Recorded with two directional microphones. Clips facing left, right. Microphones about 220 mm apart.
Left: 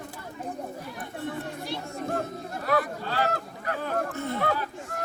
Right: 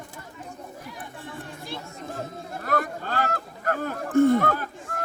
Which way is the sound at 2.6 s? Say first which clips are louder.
Left 1 dB; 50° right (ahead or behind).